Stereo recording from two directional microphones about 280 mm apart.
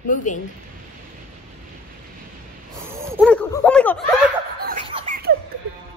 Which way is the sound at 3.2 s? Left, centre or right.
Centre.